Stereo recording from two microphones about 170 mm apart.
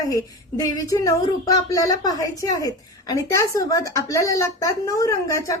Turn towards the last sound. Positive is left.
turn(degrees=20)  # may be behind; listen again after turning